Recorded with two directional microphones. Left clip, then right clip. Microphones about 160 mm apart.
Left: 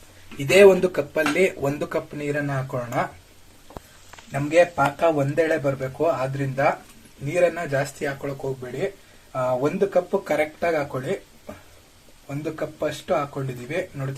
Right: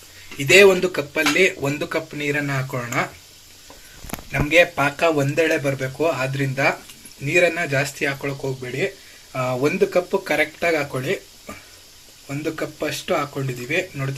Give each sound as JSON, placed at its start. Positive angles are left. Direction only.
{"t": 0.3, "sound": "speech", "side_deg": 0}
{"t": 2.3, "sound": "speech", "side_deg": -15}
{"t": 4.3, "sound": "speech", "side_deg": -5}
{"t": 5.5, "sound": "speech", "side_deg": -15}
{"t": 9.3, "sound": "speech", "side_deg": -20}
{"t": 10.1, "sound": "speech", "side_deg": -5}
{"t": 10.6, "sound": "speech", "side_deg": -15}